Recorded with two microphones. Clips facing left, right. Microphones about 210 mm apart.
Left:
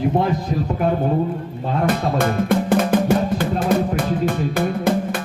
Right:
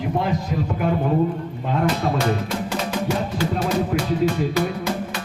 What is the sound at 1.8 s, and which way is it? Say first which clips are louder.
Music: left 2 dB; 50° left (ahead or behind).